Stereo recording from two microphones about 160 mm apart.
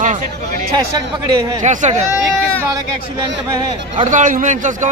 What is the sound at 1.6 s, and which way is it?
Speech, 50° right (ahead or behind).